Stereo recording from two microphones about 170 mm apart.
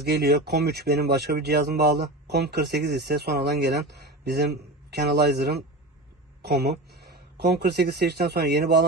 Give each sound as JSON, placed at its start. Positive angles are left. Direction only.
{"t": 0.0, "sound": "speech", "side_deg": -70}